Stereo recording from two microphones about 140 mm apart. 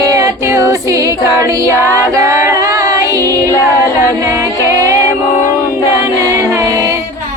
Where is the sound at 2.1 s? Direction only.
25° right (ahead or behind).